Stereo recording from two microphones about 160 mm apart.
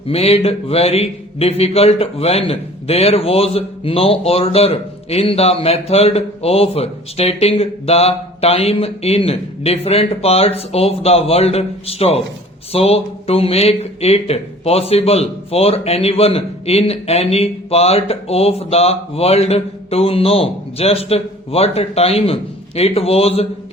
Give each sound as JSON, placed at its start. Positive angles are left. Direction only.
{"t": 0.1, "sound": "a man's voice", "side_deg": 40}